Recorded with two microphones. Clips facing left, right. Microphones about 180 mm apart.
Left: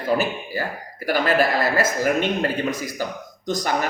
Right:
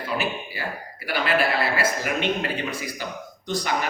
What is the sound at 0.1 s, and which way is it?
A man's voice, 35° left (ahead or behind).